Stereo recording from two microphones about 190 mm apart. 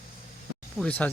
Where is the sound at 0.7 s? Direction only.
5° left (ahead or behind).